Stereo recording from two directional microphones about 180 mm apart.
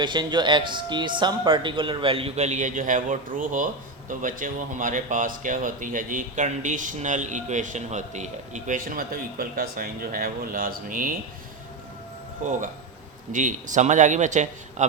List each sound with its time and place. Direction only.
0.0 s speech: 25° right (ahead or behind); by 11.2 s 50° right (ahead or behind)
13.3 s speech: 45° right (ahead or behind)